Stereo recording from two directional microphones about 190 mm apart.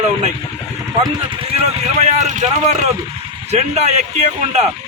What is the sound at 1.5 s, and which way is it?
Speech, 35° right (ahead or behind).